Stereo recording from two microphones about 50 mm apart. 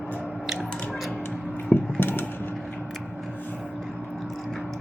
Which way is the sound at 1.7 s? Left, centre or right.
Left.